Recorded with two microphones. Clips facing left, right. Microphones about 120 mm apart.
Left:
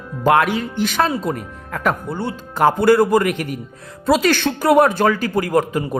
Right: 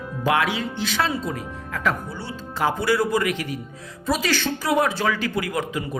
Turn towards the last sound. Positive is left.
turn(degrees=45)  # may be behind; listen again after turning